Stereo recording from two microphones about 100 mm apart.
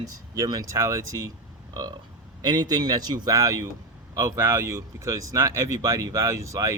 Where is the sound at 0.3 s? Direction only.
40° right (ahead or behind).